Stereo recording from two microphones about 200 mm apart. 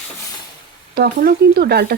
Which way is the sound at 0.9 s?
50° right (ahead or behind).